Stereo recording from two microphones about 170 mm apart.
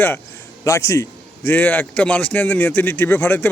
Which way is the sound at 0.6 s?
20° left (ahead or behind).